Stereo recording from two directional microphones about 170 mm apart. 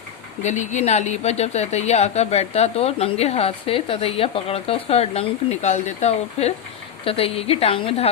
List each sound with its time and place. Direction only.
0.4 s speech: 45° left (ahead or behind)